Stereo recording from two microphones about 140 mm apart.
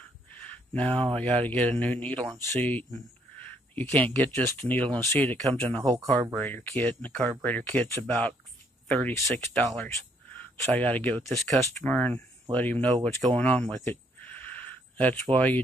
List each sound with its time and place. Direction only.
0.4 s a sound: 10° left (ahead or behind)
1.1 s speech: 10° left (ahead or behind)
5.9 s speech: 25° right (ahead or behind)
6.3 s speech: 10° left (ahead or behind)
13.4 s a sound: 10° left (ahead or behind)
15.3 s speech: 10° left (ahead or behind)